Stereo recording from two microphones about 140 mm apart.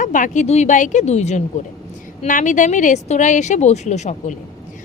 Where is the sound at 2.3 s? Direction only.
65° left (ahead or behind).